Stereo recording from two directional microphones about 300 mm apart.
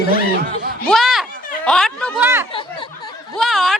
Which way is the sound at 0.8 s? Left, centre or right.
Centre.